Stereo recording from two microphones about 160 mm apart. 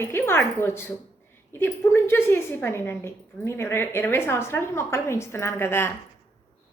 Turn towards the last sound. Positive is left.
turn(degrees=15)  # may be behind; listen again after turning